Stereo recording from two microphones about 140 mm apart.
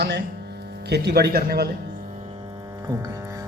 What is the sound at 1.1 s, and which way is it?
Speech, 90° right.